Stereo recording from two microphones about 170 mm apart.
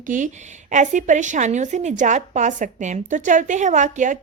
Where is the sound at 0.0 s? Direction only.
50° right (ahead or behind).